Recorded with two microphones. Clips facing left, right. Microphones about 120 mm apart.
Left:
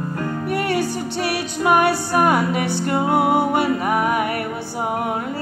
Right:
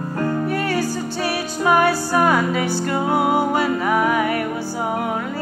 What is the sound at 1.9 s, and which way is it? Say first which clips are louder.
Music: even; 20° left (ahead or behind).